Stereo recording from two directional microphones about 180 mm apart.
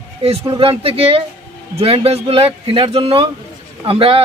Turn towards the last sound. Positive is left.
turn(degrees=-30)  # may be behind; listen again after turning